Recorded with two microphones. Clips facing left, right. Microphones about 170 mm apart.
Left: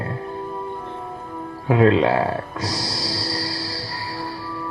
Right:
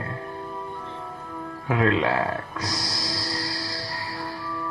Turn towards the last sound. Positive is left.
turn(degrees=30)  # may be behind; listen again after turning